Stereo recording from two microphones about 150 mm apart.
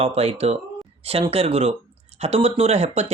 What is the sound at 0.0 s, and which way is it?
Speech, 40° right (ahead or behind).